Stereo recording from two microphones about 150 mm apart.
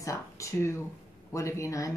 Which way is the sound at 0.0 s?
20° left (ahead or behind).